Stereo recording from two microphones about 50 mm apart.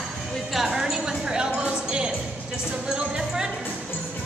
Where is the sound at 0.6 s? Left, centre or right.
Centre.